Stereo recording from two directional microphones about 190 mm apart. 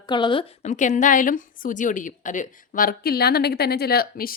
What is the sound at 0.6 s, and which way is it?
A woman's voice, 40° left (ahead or behind).